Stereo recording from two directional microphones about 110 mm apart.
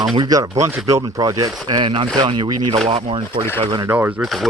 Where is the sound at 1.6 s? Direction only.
45° right (ahead or behind).